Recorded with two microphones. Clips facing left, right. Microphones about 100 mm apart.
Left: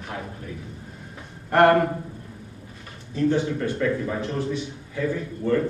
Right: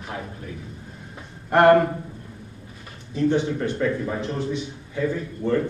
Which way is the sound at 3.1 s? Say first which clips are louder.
Right 1 dB; 20° right (ahead or behind).